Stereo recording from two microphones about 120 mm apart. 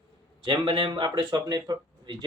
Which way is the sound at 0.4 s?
45° right (ahead or behind).